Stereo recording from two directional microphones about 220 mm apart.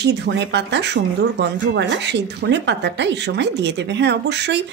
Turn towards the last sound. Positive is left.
turn(degrees=-50)  # may be behind; listen again after turning